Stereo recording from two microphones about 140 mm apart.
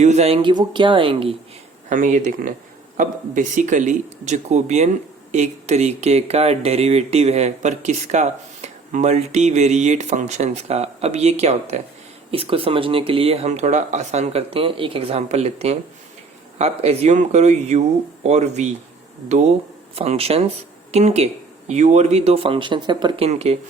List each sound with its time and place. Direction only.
0.0 s speech: 50° right (ahead or behind)
0.4 s speech: 35° right (ahead or behind)
1.9 s speech: 65° right (ahead or behind); by 23.3 s 35° right (ahead or behind)
23.3 s speech: 50° right (ahead or behind)